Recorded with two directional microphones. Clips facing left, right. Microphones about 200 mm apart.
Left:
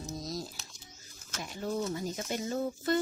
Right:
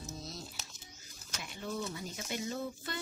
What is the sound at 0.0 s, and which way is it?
Music, 40° left (ahead or behind).